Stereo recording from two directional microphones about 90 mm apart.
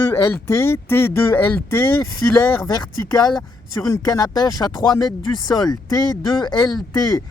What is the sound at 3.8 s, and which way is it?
Speech, 40° left (ahead or behind).